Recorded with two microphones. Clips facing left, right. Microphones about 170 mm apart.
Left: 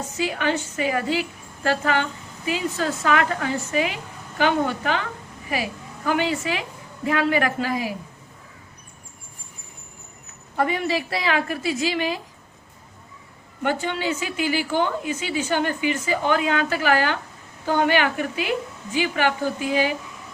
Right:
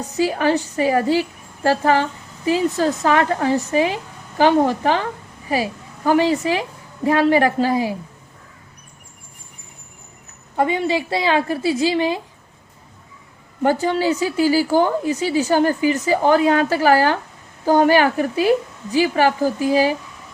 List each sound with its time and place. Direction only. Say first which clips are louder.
0.2 s a woman's voice: right 6 dB; 35° right (ahead or behind)
10.6 s a woman's voice: right 4 dB; 25° right (ahead or behind)
13.6 s a woman's voice: right 7 dB; 35° right (ahead or behind)